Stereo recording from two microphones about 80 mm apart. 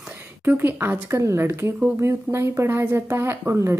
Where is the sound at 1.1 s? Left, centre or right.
Right.